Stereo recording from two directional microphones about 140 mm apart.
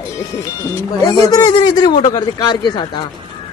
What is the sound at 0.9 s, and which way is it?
Speech, 25° left (ahead or behind).